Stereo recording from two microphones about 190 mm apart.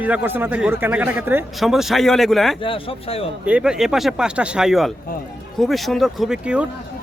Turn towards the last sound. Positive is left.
turn(degrees=-5)  # may be behind; listen again after turning